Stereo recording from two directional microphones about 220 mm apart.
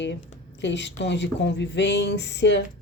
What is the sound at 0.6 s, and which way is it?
Speech, 55° left (ahead or behind).